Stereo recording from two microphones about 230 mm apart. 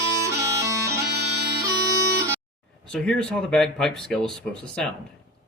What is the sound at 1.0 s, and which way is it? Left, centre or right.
Bagpipes, right.